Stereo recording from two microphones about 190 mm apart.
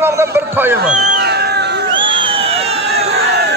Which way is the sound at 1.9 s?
25° right (ahead or behind).